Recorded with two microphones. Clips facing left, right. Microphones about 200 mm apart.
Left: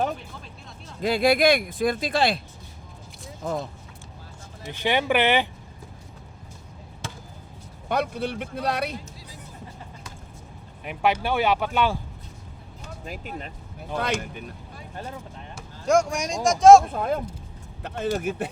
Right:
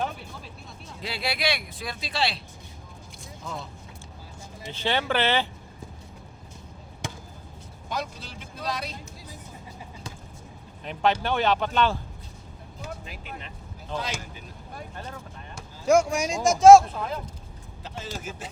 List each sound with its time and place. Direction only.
1.0 s speech: 50° left (ahead or behind)
3.4 s speech: 50° left (ahead or behind)
4.7 s speech: 15° left (ahead or behind)
7.9 s a man's voice: 60° left (ahead or behind)
10.8 s speech: 10° left (ahead or behind)
13.1 s speech: 45° left (ahead or behind)
14.2 s a man's voice: 60° left (ahead or behind)
15.5 s speech: 5° right (ahead or behind)
16.9 s a man's voice: 55° left (ahead or behind)